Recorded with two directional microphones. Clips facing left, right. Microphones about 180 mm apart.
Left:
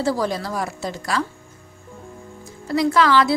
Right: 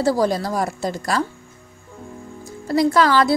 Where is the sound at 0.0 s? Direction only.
40° right (ahead or behind).